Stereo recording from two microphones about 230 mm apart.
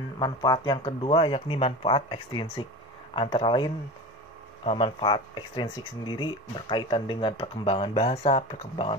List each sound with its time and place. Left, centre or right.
0.2 s speech: centre